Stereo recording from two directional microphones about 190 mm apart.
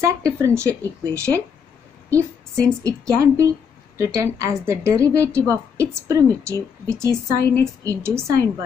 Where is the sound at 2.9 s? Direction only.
15° right (ahead or behind).